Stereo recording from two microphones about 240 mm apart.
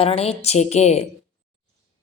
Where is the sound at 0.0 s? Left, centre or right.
Left.